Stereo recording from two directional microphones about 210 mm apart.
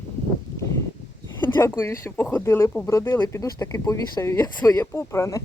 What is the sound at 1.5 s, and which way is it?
Speech, 15° left (ahead or behind).